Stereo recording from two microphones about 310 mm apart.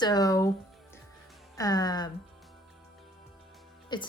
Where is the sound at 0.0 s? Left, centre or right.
Centre.